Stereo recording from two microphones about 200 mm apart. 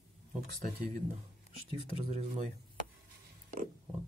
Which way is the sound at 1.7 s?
30° left (ahead or behind).